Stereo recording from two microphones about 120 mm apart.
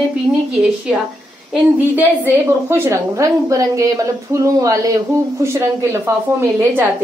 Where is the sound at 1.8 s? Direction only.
20° right (ahead or behind).